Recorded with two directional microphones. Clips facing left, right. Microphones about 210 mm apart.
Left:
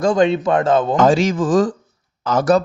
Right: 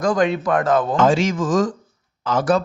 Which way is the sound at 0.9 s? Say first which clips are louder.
Left 3 dB; 40° left (ahead or behind).